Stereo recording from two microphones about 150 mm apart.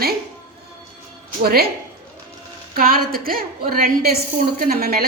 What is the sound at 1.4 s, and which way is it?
Speech, 90° right.